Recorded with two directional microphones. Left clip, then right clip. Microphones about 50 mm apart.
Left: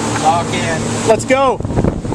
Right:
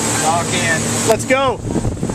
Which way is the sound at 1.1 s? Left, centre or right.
Left.